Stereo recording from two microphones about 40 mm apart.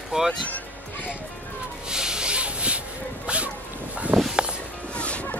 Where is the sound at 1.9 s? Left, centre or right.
Centre.